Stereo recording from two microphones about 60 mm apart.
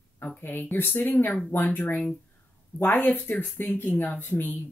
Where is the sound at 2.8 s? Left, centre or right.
Left.